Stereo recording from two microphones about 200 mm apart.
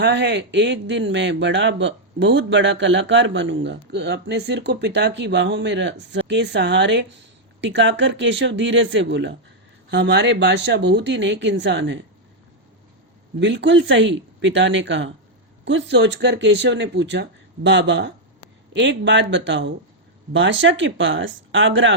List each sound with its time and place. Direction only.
0.0 s a man's voice: 60° right (ahead or behind)
13.4 s a man's voice: 60° right (ahead or behind)